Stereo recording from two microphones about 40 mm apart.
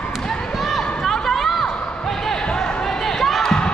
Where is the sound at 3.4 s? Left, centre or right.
Centre.